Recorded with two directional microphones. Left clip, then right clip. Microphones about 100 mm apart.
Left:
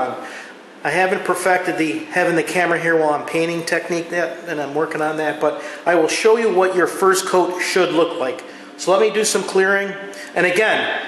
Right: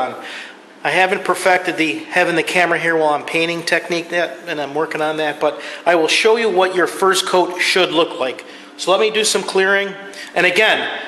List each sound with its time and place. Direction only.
0.8 s a man's voice: 15° right (ahead or behind)